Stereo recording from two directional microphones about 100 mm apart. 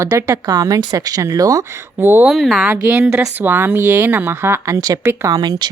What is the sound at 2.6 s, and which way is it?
A woman's voice, 15° right (ahead or behind).